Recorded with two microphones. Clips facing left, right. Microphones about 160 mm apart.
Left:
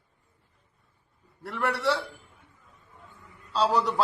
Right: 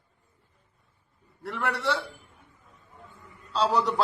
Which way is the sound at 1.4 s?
5° left (ahead or behind).